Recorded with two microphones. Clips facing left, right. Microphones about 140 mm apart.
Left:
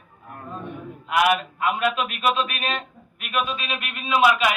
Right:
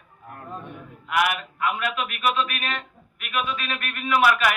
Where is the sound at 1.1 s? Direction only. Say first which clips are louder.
Left 4 dB; 25° left (ahead or behind).